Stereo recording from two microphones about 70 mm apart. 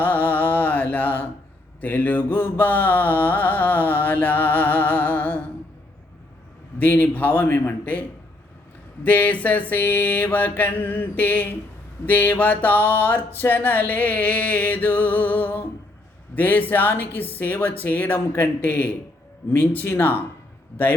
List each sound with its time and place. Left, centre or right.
0.0 s mantra: left
6.7 s mantra: left
9.0 s mantra: left